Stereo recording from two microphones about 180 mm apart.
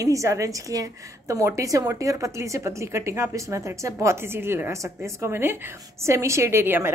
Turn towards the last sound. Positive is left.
turn(degrees=-15)  # may be behind; listen again after turning